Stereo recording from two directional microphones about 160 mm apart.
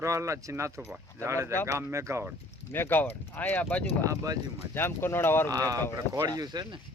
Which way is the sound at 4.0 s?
20° right (ahead or behind).